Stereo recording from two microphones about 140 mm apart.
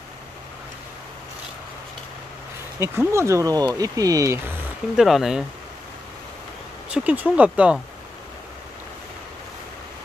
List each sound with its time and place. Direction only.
2.8 s speech: 20° right (ahead or behind)
4.9 s speech: centre (ahead or behind)
6.9 s speech: 10° right (ahead or behind)